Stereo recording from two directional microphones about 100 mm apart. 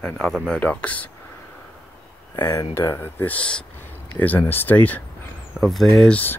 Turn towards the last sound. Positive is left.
turn(degrees=15)  # may be behind; listen again after turning